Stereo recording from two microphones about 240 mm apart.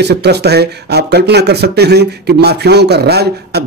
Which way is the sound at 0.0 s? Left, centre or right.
Right.